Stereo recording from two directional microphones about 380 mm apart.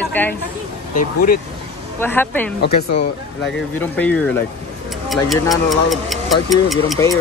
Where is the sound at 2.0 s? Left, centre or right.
Centre.